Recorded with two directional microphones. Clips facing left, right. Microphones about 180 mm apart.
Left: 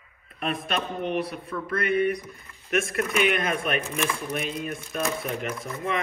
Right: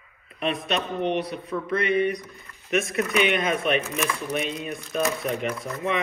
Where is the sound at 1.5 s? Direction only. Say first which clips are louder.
Right 4 dB; 30° right (ahead or behind).